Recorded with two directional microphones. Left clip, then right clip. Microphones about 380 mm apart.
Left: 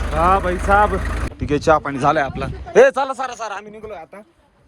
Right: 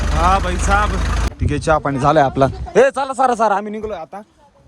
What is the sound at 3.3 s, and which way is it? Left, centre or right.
Speech, right.